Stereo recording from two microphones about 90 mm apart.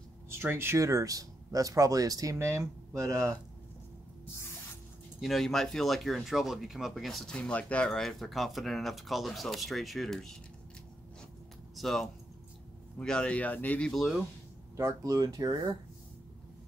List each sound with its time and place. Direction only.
0.4 s speech: 25° right (ahead or behind)
5.2 s speech: centre (ahead or behind)
11.7 s speech: centre (ahead or behind); by 13.8 s 20° left (ahead or behind)
13.8 s speech: centre (ahead or behind)
14.8 s speech: 40° right (ahead or behind)